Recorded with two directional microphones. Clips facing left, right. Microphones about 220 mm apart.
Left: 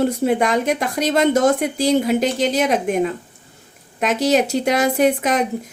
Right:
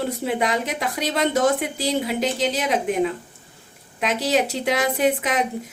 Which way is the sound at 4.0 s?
45° left (ahead or behind).